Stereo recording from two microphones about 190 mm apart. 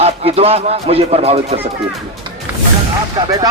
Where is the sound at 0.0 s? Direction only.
30° right (ahead or behind).